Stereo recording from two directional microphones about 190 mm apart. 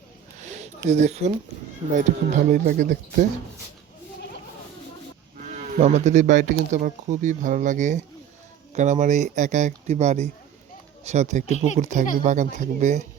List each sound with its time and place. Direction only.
0.4 s a sound: 35° right (ahead or behind)
0.9 s speech: 35° right (ahead or behind)
5.7 s speech: 40° right (ahead or behind)